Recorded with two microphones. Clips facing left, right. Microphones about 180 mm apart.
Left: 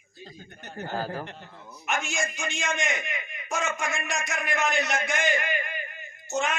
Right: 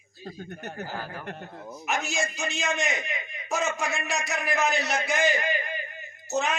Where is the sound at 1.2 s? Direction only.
55° right (ahead or behind).